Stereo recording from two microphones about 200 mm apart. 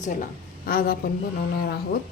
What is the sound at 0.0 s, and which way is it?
A woman's voice, 45° left (ahead or behind).